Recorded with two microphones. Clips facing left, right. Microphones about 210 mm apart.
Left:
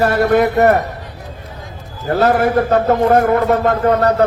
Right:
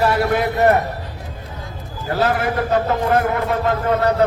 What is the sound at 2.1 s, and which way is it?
A man's voice, 50° left (ahead or behind).